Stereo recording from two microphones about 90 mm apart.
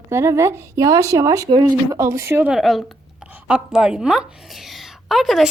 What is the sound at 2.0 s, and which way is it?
Speech, 30° right (ahead or behind).